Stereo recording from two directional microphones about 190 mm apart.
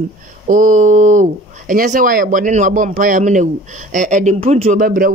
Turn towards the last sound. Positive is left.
turn(degrees=-50)  # may be behind; listen again after turning